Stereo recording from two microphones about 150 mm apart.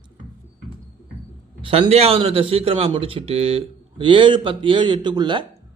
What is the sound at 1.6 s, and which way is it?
A man's voice, 40° right (ahead or behind).